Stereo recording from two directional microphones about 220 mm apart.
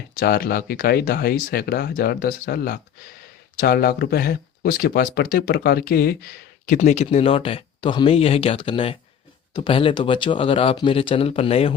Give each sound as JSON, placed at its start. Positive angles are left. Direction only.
{"t": 0.2, "sound": "speech", "side_deg": 45}
{"t": 6.7, "sound": "speech", "side_deg": 30}